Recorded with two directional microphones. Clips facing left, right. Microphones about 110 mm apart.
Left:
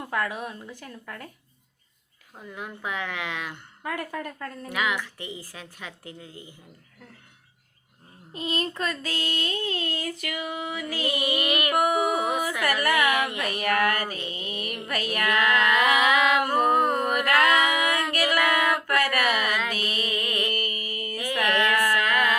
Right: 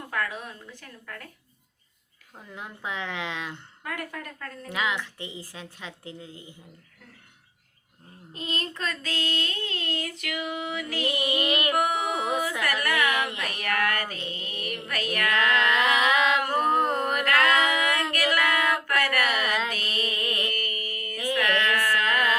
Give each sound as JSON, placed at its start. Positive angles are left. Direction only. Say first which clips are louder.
{"t": 0.1, "sound": "speech", "louder": "left 2 dB", "side_deg": 10}
{"t": 2.6, "sound": "a woman's voice", "louder": "left 2 dB", "side_deg": -25}
{"t": 3.8, "sound": "speech", "louder": "left 4 dB", "side_deg": 5}
{"t": 4.7, "sound": "a woman's voice", "louder": "left 1 dB", "side_deg": -25}
{"t": 8.3, "sound": "child singing", "louder": "left 4 dB", "side_deg": 5}
{"t": 11.4, "sound": "a woman's voice", "louder": "even", "side_deg": -30}
{"t": 11.7, "sound": "a sound", "louder": "left 6 dB", "side_deg": 5}
{"t": 19.7, "sound": "music", "louder": "left 3 dB", "side_deg": 10}
{"t": 20.2, "sound": "music", "louder": "left 1 dB", "side_deg": 20}
{"t": 20.5, "sound": "mantra", "louder": "left 2 dB", "side_deg": 10}
{"t": 21.3, "sound": "a sound", "louder": "left 2 dB", "side_deg": 15}